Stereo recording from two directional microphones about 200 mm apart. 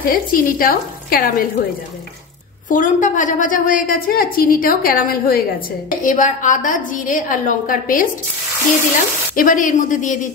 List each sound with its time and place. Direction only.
0.0 s a woman's voice: 45° left (ahead or behind)
2.7 s a woman's voice: 40° left (ahead or behind)
9.3 s a woman's voice: 40° left (ahead or behind)